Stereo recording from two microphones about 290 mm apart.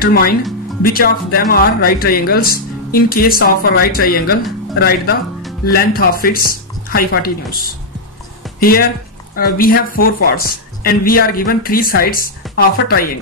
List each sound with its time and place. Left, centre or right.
0.0 s speech: left